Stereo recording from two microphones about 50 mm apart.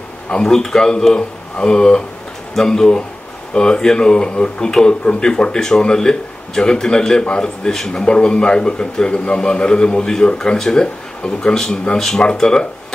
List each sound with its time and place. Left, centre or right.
0.3 s speech: centre